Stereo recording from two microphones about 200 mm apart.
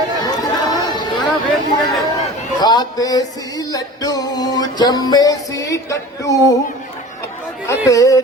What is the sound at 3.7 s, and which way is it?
Music, 20° left (ahead or behind).